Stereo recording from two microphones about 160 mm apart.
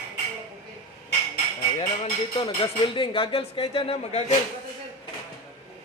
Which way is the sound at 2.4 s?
30° left (ahead or behind).